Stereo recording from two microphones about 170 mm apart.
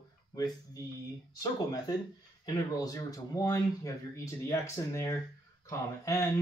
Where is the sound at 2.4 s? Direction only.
20° left (ahead or behind).